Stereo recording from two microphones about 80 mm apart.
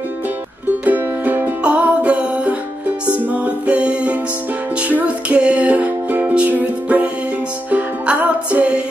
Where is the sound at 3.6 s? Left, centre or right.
Centre.